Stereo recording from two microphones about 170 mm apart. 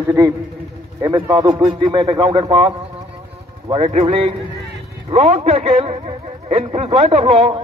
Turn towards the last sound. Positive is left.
turn(degrees=-35)  # may be behind; listen again after turning